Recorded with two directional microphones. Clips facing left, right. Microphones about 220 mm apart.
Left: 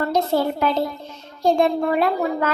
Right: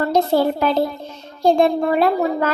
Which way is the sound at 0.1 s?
35° right (ahead or behind).